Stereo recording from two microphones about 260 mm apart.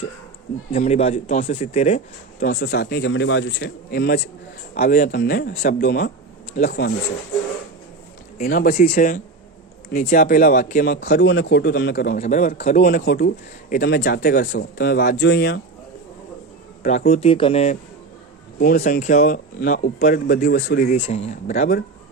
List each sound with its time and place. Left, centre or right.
0.7 s speech: left
2.4 s speech: left
8.4 s speech: left
12.8 s speech: left
16.8 s speech: left